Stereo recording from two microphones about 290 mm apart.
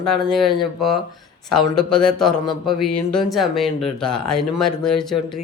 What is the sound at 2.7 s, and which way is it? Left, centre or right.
Speech, left.